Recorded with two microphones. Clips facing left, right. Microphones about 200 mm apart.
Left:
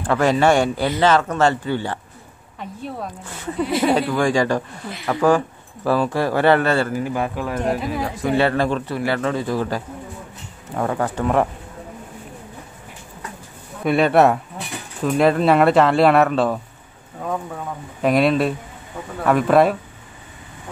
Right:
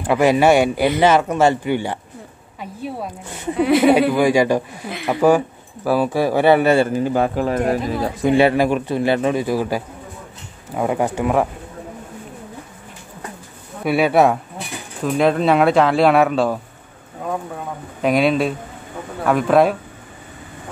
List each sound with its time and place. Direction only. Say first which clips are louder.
0.0 s speech: right 2 dB; 10° right (ahead or behind)
3.3 s speech: right 4 dB; 15° right (ahead or behind)
3.5 s speech: right 6 dB; 70° right (ahead or behind)
4.1 s speech: right 3 dB; 10° right (ahead or behind)
7.0 s speech: right 5 dB; 30° right (ahead or behind)
8.3 s speech: right 4 dB; 15° right (ahead or behind)
13.8 s speech: even; 5° right (ahead or behind)
18.0 s speech: even; centre (ahead or behind)